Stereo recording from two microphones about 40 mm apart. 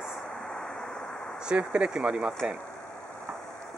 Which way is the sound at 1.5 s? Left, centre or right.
Right.